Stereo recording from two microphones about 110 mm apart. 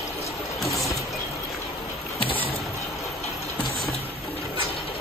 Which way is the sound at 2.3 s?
55° left (ahead or behind).